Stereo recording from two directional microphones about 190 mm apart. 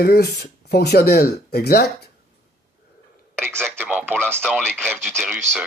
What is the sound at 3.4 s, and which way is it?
Radio, 10° right (ahead or behind).